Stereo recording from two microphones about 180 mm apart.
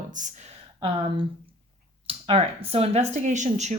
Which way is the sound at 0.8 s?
30° right (ahead or behind).